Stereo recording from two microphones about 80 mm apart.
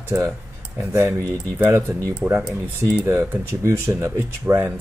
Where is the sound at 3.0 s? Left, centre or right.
Right.